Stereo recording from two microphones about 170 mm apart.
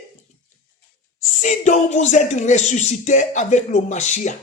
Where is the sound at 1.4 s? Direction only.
45° left (ahead or behind).